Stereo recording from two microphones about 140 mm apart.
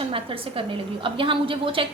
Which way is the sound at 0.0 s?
40° right (ahead or behind).